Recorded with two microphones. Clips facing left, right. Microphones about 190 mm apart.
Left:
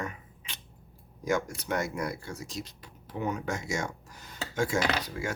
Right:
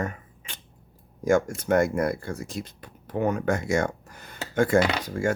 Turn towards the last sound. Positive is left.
turn(degrees=-50)  # may be behind; listen again after turning